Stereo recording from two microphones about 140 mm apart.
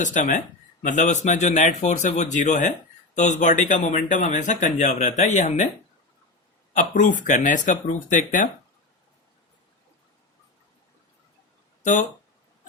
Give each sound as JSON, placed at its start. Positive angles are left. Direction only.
{"t": 0.0, "sound": "speech", "side_deg": 65}
{"t": 6.7, "sound": "speech", "side_deg": 65}
{"t": 11.8, "sound": "speech", "side_deg": 65}